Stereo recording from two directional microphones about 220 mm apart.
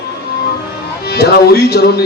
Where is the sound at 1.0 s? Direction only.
45° left (ahead or behind).